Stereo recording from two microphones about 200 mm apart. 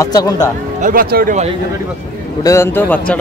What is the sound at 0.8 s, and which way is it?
Speech, 45° right (ahead or behind).